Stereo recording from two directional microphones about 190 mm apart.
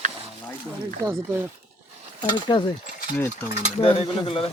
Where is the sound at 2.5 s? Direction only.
25° left (ahead or behind).